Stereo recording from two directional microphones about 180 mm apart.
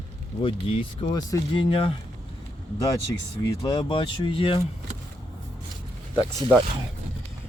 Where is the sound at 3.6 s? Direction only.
25° left (ahead or behind).